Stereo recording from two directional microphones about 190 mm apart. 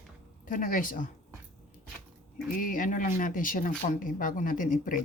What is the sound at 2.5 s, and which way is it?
Speech, 45° left (ahead or behind).